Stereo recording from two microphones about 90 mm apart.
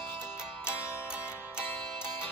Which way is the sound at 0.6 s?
25° left (ahead or behind).